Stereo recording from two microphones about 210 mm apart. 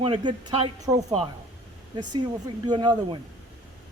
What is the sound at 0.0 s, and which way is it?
Speech, 25° right (ahead or behind).